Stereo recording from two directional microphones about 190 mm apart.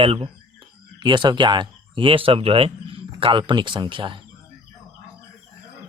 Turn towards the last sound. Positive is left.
turn(degrees=-25)  # may be behind; listen again after turning